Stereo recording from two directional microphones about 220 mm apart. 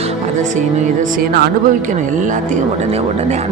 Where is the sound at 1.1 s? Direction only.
40° right (ahead or behind).